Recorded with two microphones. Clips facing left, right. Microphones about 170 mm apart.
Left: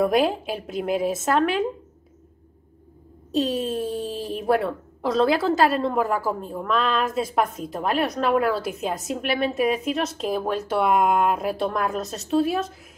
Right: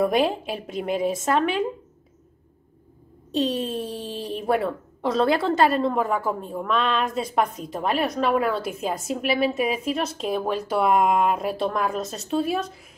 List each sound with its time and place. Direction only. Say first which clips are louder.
0.0 s speech: left 1 dB; centre (ahead or behind)
3.3 s speech: left 1 dB; centre (ahead or behind)